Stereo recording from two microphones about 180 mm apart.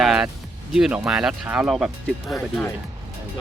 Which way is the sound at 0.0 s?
Centre (ahead or behind).